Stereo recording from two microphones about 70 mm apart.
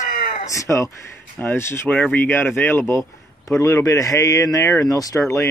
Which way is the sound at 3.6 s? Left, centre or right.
Left.